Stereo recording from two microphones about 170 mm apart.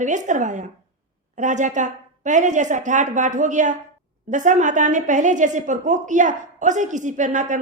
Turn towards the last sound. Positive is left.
turn(degrees=-45)  # may be behind; listen again after turning